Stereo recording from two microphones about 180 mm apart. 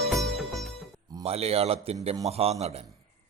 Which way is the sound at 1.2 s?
35° right (ahead or behind).